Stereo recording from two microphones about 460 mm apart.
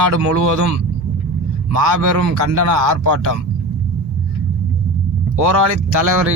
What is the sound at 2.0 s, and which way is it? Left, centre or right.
Speech, right.